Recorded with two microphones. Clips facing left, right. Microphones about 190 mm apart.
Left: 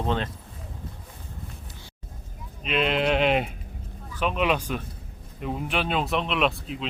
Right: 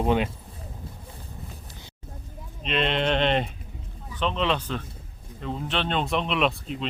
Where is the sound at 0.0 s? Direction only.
15° right (ahead or behind).